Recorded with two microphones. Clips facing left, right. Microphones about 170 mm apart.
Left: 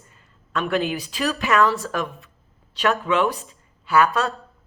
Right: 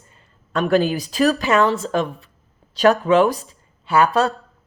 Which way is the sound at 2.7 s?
40° right (ahead or behind).